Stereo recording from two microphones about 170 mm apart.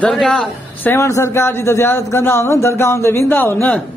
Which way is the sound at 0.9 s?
15° left (ahead or behind).